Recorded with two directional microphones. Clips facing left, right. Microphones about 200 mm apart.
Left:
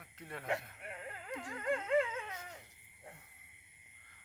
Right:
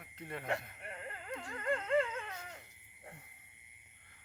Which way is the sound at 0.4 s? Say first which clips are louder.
Left 1 dB; 5° left (ahead or behind).